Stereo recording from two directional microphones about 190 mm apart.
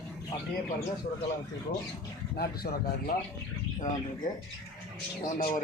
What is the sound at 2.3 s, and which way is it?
Speech, 55° left (ahead or behind).